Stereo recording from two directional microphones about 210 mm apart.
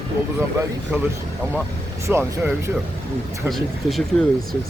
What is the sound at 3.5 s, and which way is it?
Speech, centre (ahead or behind).